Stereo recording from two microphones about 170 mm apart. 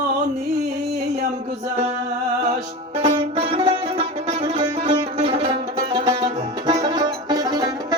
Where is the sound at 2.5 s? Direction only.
40° right (ahead or behind).